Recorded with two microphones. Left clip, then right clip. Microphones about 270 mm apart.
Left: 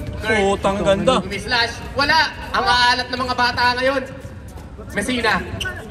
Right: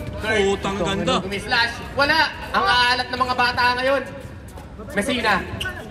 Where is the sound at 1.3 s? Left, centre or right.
Left.